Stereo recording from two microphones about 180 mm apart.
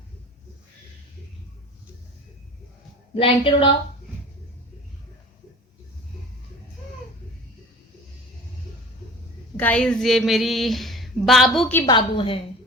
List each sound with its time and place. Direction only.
3.2 s a woman's voice: 30° left (ahead or behind)
9.6 s speech: 10° left (ahead or behind)
11.9 s a woman's voice: 25° left (ahead or behind)